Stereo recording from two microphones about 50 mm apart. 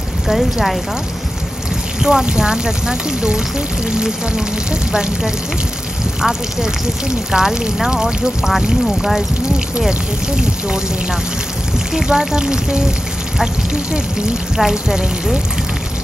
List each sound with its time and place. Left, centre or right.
0.3 s speech: centre
2.0 s speech: centre
6.2 s speech: centre
11.9 s speech: centre
14.6 s speech: centre